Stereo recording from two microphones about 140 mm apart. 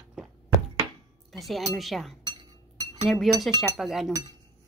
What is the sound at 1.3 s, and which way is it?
A woman's voice, centre (ahead or behind).